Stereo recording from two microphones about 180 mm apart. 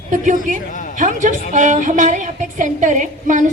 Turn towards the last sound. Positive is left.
turn(degrees=-45)  # may be behind; listen again after turning